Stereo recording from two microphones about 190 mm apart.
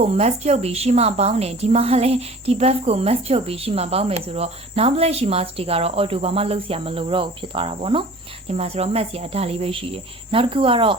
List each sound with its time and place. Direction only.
0.0 s a woman's voice: 35° right (ahead or behind)